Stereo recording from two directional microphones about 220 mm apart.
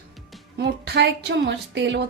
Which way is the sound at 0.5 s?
50° right (ahead or behind).